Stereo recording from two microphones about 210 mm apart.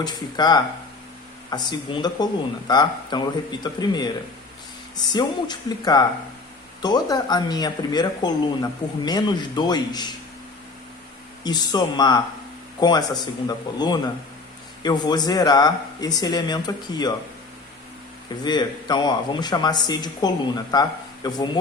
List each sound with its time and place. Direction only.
0.0 s speech: 20° left (ahead or behind)
11.4 s speech: 20° left (ahead or behind)
18.4 s speech: 20° left (ahead or behind)